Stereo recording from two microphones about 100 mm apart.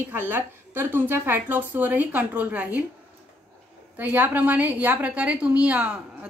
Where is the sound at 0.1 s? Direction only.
20° right (ahead or behind).